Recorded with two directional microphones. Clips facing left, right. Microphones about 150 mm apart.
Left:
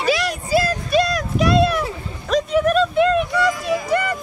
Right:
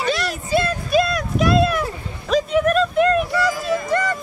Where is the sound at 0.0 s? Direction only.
Centre (ahead or behind).